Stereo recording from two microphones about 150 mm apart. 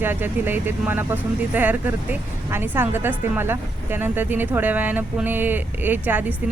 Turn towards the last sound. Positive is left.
turn(degrees=-10)  # may be behind; listen again after turning